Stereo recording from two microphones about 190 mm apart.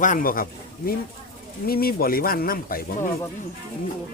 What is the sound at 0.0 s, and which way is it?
Speech, 45° left (ahead or behind).